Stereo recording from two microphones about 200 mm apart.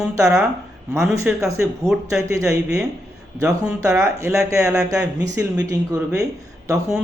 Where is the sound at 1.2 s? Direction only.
15° right (ahead or behind).